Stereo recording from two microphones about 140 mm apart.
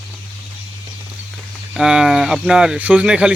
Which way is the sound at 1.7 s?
5° right (ahead or behind).